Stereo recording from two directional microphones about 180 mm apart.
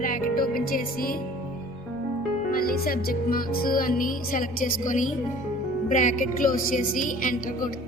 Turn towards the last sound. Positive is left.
turn(degrees=50)  # may be behind; listen again after turning